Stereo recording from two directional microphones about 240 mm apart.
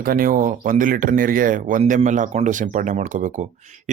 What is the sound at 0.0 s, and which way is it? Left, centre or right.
Speech, right.